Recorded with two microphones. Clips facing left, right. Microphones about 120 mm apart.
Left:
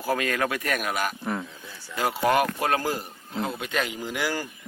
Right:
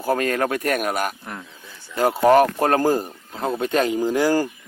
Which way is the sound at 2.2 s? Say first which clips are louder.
Right 8 dB; 35° right (ahead or behind).